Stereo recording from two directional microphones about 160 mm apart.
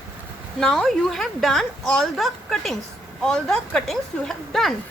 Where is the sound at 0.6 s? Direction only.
Centre (ahead or behind).